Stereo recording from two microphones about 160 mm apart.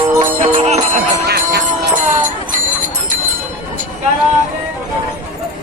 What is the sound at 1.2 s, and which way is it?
Jingle bell, 85° right.